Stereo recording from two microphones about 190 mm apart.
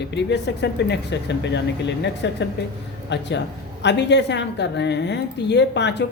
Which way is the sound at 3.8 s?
65° left (ahead or behind).